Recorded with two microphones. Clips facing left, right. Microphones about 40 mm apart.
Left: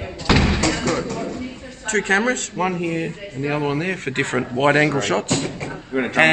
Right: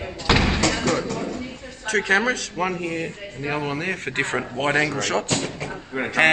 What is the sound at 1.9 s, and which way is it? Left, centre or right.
Speech, right.